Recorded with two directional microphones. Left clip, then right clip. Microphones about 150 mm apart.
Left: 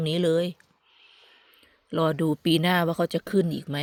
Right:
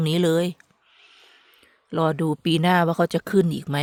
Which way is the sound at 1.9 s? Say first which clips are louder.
Right 2 dB; 30° right (ahead or behind).